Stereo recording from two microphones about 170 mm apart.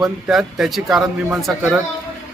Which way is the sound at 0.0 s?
Centre (ahead or behind).